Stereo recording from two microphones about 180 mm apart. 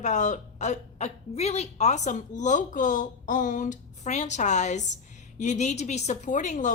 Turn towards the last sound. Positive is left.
turn(degrees=45)  # may be behind; listen again after turning